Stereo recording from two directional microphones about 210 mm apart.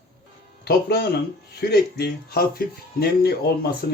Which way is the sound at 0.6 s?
50° left (ahead or behind).